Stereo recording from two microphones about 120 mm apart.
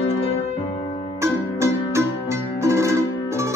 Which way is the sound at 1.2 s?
25° right (ahead or behind).